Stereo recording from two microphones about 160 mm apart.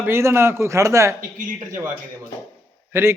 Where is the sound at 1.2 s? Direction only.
55° right (ahead or behind).